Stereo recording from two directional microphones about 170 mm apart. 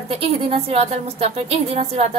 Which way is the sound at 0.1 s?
35° right (ahead or behind).